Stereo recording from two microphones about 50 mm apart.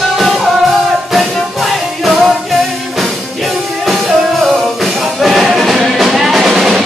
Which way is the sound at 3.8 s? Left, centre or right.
Centre.